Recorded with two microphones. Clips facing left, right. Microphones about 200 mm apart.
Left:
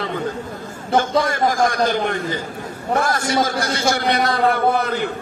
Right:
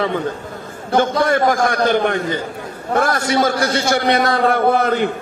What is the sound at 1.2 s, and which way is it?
A man's voice, 55° right (ahead or behind).